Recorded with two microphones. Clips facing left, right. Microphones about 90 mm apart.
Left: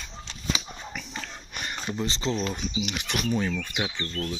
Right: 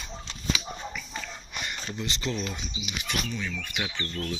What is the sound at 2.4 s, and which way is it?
Speech, 45° left (ahead or behind).